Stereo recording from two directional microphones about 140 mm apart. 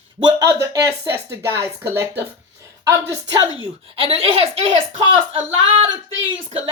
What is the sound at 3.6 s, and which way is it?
Speech, 45° right (ahead or behind).